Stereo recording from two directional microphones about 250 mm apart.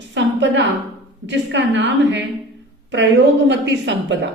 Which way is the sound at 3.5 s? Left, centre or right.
Right.